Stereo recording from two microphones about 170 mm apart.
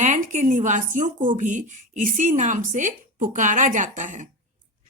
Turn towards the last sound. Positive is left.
turn(degrees=-45)  # may be behind; listen again after turning